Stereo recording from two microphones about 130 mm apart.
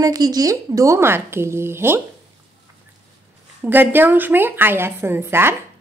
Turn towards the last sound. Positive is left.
turn(degrees=-20)  # may be behind; listen again after turning